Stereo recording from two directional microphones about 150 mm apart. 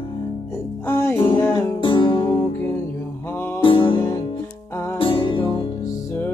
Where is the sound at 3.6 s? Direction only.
35° left (ahead or behind).